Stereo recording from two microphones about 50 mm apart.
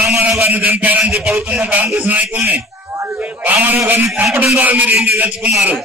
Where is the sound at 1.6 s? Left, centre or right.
Right.